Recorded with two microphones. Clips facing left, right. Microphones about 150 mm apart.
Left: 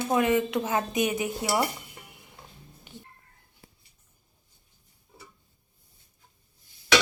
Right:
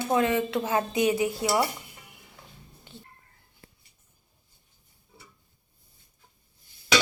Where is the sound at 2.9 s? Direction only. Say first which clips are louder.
Left 1 dB; 15° left (ahead or behind).